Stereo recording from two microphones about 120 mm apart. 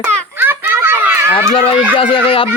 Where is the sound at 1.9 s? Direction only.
45° left (ahead or behind).